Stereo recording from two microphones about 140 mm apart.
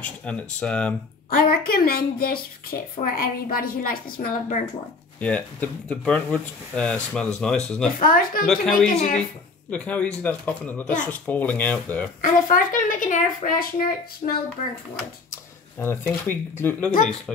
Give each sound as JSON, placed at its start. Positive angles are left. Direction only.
{"t": 0.0, "sound": "speech", "side_deg": 10}
{"t": 1.3, "sound": "a woman's voice", "side_deg": 90}
{"t": 5.2, "sound": "speech", "side_deg": 10}
{"t": 8.0, "sound": "a woman's voice", "side_deg": 85}
{"t": 8.5, "sound": "speech", "side_deg": 5}
{"t": 8.9, "sound": "speech", "side_deg": 60}
{"t": 9.7, "sound": "speech", "side_deg": 10}
{"t": 12.2, "sound": "speech", "side_deg": 75}
{"t": 15.8, "sound": "speech", "side_deg": 15}